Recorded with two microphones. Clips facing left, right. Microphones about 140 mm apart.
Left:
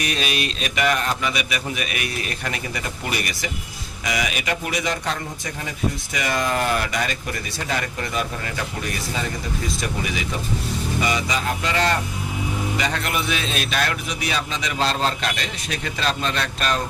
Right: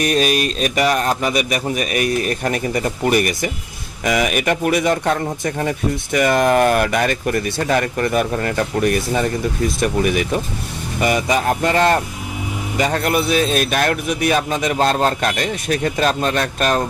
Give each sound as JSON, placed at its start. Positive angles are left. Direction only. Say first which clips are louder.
{"t": 0.0, "sound": "a man's voice", "louder": "right 8 dB", "side_deg": -45}